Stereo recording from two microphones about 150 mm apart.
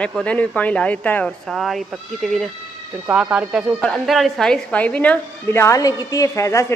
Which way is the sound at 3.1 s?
10° right (ahead or behind).